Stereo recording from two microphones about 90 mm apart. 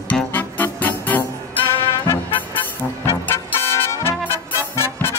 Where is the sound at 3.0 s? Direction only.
30° left (ahead or behind).